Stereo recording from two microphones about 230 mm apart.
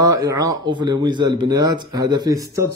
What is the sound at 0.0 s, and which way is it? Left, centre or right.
Speech, centre.